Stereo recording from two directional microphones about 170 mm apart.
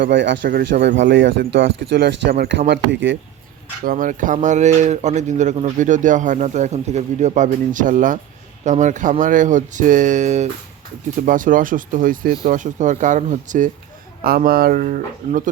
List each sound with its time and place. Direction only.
0.0 s speech: 90° right
0.4 s speech: 75° right (ahead or behind); by 3.2 s 90° right
3.8 s speech: 50° right (ahead or behind)
14.3 s speech: 60° right (ahead or behind)